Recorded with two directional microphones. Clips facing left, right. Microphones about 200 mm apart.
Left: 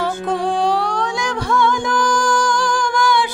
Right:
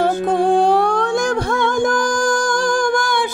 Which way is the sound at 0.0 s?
50° right (ahead or behind).